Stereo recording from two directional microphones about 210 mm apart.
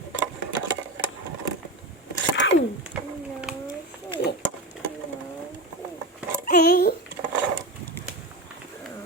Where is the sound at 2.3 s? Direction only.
60° left (ahead or behind).